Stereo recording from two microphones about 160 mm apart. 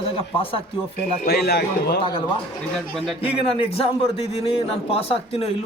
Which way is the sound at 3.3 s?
35° left (ahead or behind).